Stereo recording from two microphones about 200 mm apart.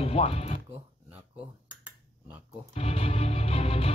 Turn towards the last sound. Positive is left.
turn(degrees=30)  # may be behind; listen again after turning